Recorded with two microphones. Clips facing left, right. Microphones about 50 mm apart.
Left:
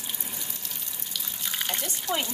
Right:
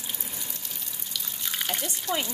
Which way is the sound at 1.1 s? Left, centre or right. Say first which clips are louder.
Even; centre.